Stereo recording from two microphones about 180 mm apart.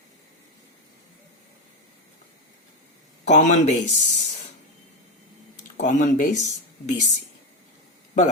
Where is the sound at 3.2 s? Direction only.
40° left (ahead or behind).